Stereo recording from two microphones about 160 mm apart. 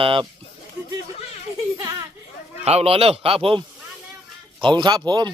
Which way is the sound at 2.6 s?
40° right (ahead or behind).